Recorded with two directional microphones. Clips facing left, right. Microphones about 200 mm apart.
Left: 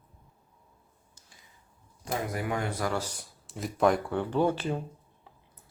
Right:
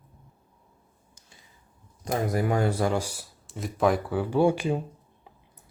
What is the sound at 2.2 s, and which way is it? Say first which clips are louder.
Speech: right 8 dB; 35° right (ahead or behind).